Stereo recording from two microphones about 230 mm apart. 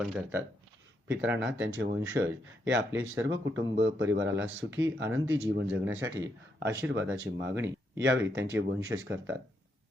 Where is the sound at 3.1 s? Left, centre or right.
Right.